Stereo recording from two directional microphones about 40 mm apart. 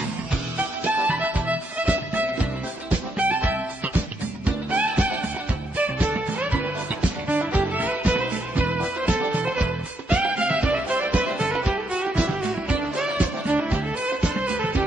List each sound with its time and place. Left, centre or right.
0.8 s music: right
11.4 s music: right
13.5 s music: right